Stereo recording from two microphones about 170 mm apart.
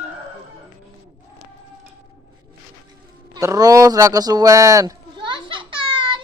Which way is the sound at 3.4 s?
20° right (ahead or behind).